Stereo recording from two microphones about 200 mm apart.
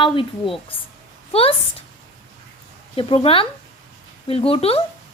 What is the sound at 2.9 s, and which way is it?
A woman's voice, 25° left (ahead or behind).